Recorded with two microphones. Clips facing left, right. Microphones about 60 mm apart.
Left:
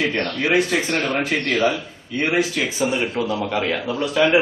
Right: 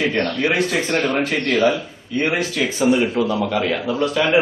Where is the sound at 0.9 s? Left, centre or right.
Centre.